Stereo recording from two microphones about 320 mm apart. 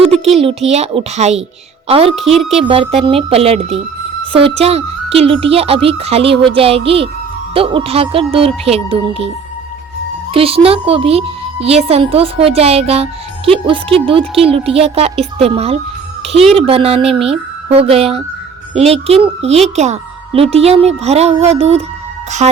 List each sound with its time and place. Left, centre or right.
0.3 s speech: centre
10.3 s speech: centre